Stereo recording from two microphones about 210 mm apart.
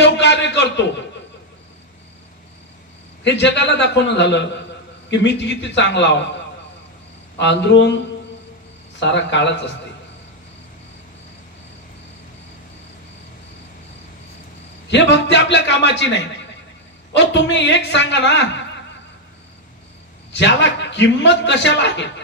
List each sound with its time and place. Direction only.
0.0 s a sound: 55° left (ahead or behind)
3.3 s a man's voice: 55° left (ahead or behind)
7.3 s a man's voice: 55° left (ahead or behind)
9.0 s a man's voice: 55° left (ahead or behind)
14.9 s a man's voice: 55° left (ahead or behind)
17.3 s a man's voice: 60° left (ahead or behind)
20.3 s a man's voice: 60° left (ahead or behind)